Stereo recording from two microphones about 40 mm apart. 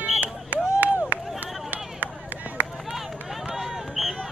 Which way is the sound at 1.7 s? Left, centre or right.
Right.